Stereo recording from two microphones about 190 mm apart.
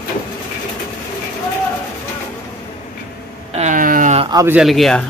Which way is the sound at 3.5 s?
40° right (ahead or behind).